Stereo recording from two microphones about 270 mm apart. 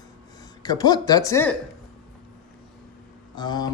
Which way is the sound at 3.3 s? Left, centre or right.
Centre.